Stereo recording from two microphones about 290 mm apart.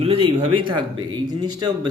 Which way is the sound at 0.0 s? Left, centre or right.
Centre.